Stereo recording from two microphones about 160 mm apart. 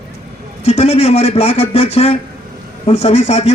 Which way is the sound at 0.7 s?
40° left (ahead or behind).